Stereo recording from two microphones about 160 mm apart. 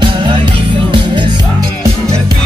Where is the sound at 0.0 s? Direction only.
30° right (ahead or behind).